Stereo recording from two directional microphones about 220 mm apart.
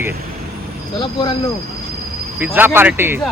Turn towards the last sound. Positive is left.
turn(degrees=-10)  # may be behind; listen again after turning